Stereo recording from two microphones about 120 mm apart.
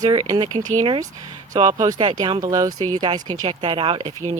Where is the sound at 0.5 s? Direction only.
90° right.